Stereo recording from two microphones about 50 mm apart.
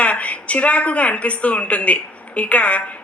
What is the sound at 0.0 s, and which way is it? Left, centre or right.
A woman's voice, left.